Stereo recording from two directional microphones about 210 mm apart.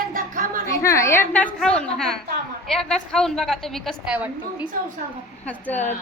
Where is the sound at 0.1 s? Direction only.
40° right (ahead or behind).